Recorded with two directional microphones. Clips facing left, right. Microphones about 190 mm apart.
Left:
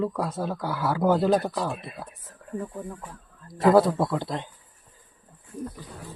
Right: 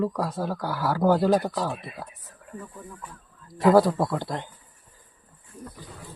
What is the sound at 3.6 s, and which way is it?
Speech, 25° left (ahead or behind).